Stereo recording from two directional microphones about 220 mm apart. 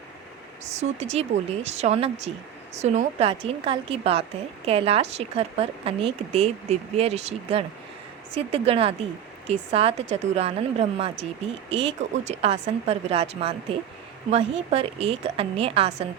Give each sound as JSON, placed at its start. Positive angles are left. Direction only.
{"t": 0.7, "sound": "speech", "side_deg": -30}